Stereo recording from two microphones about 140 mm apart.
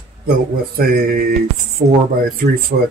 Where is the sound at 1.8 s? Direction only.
45° right (ahead or behind).